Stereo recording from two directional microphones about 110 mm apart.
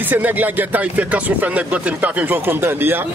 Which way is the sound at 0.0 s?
15° right (ahead or behind).